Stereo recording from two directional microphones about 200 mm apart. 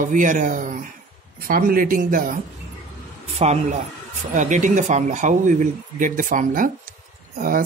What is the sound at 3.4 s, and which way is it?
Speech, 35° right (ahead or behind).